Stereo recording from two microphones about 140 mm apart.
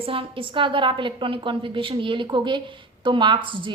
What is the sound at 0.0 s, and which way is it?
A woman's voice, 40° right (ahead or behind).